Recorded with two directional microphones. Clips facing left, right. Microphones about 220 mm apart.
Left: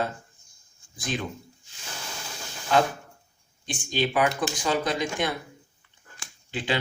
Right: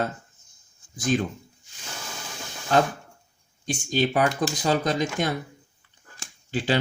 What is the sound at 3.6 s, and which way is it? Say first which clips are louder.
Speech: right 3 dB; 45° right (ahead or behind).